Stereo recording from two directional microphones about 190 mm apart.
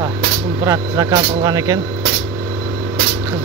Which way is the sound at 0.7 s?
20° right (ahead or behind).